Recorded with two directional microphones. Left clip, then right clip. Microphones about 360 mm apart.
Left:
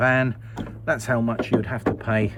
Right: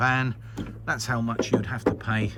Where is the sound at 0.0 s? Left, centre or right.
Centre.